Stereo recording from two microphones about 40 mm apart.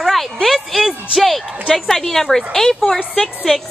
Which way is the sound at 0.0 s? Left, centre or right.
Centre.